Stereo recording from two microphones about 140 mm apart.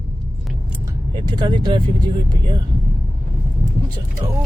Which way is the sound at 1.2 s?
35° right (ahead or behind).